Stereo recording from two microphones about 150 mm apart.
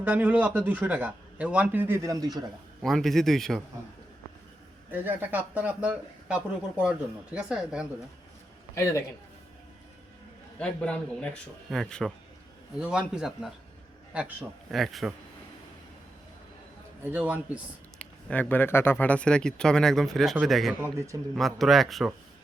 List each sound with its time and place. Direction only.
0.0 s a man's voice: 10° right (ahead or behind)
2.8 s a man's voice: centre (ahead or behind)
4.9 s a man's voice: 10° right (ahead or behind)
8.7 s a man's voice: 20° left (ahead or behind)
10.6 s a man's voice: 5° left (ahead or behind)
17.0 s a man's voice: 10° right (ahead or behind)
18.0 s a man's voice: 10° left (ahead or behind)